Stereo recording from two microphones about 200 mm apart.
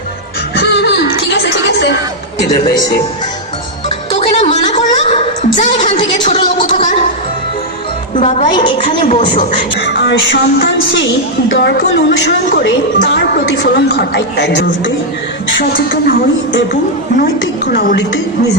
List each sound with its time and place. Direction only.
0.5 s music: 55° left (ahead or behind)
4.2 s a sound: 30° left (ahead or behind)
5.7 s a woman's voice: 25° left (ahead or behind)
6.2 s speech: 40° left (ahead or behind)
8.1 s a woman's voice: 30° left (ahead or behind)
9.8 s a woman's voice: 60° left (ahead or behind)
15.7 s a woman's voice: 45° left (ahead or behind)
17.2 s a woman's voice: 50° left (ahead or behind)